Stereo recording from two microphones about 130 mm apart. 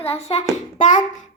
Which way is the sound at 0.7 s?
70° left (ahead or behind).